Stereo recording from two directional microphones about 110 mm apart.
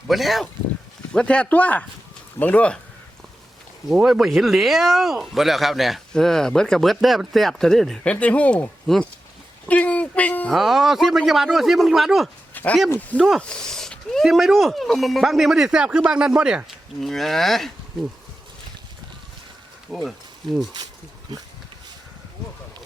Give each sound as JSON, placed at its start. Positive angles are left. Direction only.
{"t": 0.1, "sound": "speech", "side_deg": 0}
{"t": 3.8, "sound": "speech", "side_deg": -5}
{"t": 10.5, "sound": "speech", "side_deg": 0}
{"t": 12.6, "sound": "a sound", "side_deg": 15}
{"t": 12.9, "sound": "speech", "side_deg": 15}
{"t": 19.9, "sound": "speech", "side_deg": 0}